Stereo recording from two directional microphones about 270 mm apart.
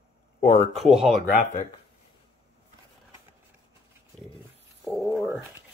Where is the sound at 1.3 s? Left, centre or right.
Left.